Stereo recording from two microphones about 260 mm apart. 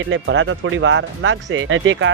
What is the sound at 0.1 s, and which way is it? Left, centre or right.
Speech, right.